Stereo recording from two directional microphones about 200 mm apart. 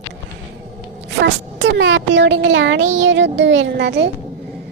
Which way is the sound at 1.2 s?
65° right (ahead or behind).